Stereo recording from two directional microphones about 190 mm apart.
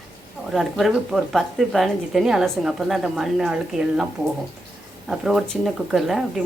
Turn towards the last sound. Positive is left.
turn(degrees=0)  # may be behind; listen again after turning